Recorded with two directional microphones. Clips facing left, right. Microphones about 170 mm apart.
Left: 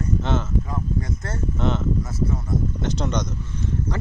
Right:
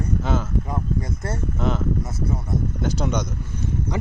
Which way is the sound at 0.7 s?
30° right (ahead or behind).